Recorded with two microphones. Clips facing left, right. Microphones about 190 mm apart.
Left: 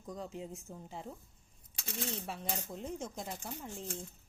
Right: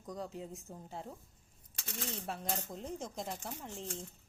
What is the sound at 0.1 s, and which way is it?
Speech, centre (ahead or behind).